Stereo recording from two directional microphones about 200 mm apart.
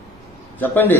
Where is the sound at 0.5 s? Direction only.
10° left (ahead or behind).